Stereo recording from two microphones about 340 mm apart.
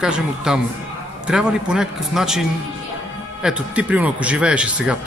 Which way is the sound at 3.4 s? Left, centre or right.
Centre.